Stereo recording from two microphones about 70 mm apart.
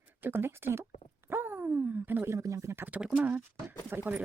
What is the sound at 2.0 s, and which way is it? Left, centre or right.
Speech, right.